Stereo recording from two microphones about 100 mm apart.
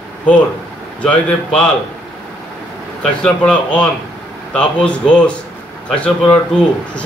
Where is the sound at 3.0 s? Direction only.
10° left (ahead or behind).